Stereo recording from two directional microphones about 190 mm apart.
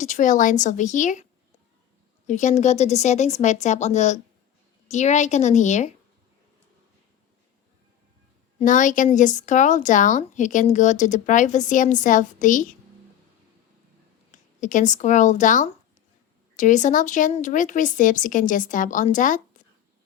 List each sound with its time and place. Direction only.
0.0 s speech: 40° left (ahead or behind)
8.5 s speech: 40° left (ahead or behind)
14.3 s speech: 40° left (ahead or behind)